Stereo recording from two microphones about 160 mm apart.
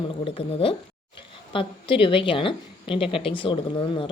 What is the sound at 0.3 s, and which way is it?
Speech, 35° left (ahead or behind).